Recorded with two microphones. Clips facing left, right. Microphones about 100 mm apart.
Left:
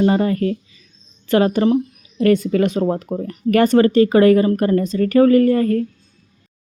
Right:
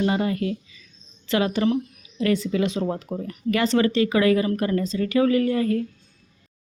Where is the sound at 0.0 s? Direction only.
40° left (ahead or behind).